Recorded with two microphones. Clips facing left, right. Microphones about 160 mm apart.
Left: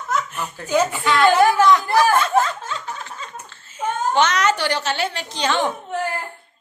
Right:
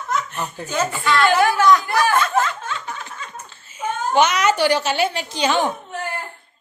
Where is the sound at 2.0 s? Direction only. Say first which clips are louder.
Left 1 dB; 35° left (ahead or behind).